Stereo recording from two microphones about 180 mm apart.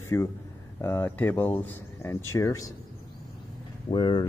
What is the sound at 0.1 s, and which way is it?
Speech, 15° left (ahead or behind).